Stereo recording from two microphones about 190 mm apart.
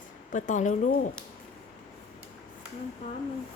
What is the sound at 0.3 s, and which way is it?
Speech, 40° left (ahead or behind).